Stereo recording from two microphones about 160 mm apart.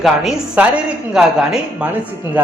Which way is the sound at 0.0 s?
Centre (ahead or behind).